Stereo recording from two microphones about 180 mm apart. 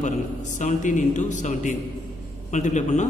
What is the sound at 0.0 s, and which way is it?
A man's voice, 40° left (ahead or behind).